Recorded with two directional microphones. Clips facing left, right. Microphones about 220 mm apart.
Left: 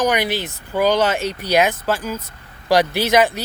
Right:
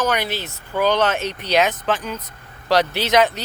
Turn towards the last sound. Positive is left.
turn(degrees=10)  # may be behind; listen again after turning